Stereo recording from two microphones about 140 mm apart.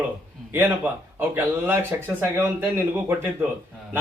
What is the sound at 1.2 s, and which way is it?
A man's voice, 15° right (ahead or behind).